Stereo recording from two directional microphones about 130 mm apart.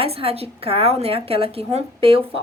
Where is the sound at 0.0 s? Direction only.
45° right (ahead or behind).